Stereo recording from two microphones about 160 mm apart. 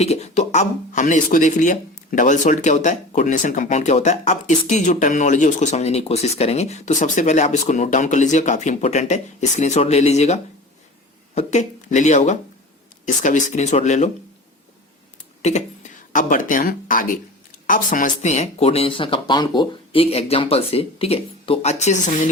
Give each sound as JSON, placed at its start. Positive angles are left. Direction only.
{"t": 0.0, "sound": "speech", "side_deg": 40}
{"t": 15.4, "sound": "speech", "side_deg": 45}